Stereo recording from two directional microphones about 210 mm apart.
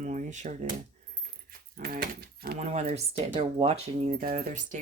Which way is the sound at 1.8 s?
45° right (ahead or behind).